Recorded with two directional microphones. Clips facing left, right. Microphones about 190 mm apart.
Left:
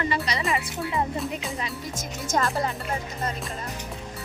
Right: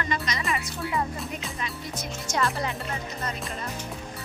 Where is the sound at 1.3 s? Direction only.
25° left (ahead or behind).